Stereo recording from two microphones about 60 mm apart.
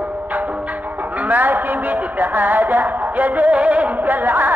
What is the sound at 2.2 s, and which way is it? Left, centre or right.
Music, right.